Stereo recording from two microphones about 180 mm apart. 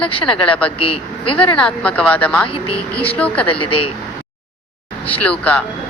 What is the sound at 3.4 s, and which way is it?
Speech, 30° left (ahead or behind).